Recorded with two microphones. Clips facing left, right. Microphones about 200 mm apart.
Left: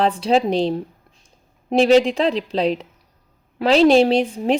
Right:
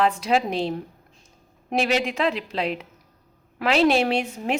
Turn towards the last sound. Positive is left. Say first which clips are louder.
# left 7 dB
turn(degrees=35)  # may be behind; listen again after turning